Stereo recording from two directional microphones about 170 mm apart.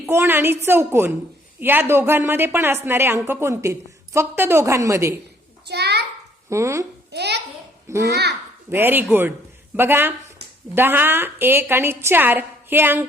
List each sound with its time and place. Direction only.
0.0 s a woman's voice: 15° right (ahead or behind)
5.6 s a sound: 70° right (ahead or behind)
6.5 s a woman's voice: 15° right (ahead or behind)
7.1 s a child's voice: 75° right (ahead or behind)
8.7 s a woman's voice: 10° right (ahead or behind)